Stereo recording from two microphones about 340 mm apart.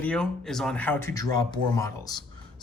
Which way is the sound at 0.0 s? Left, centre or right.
Centre.